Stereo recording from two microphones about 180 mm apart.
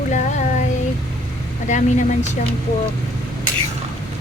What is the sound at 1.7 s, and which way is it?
Speech, 45° left (ahead or behind).